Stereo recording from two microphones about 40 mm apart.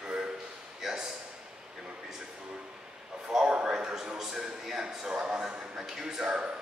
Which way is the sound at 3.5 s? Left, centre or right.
Centre.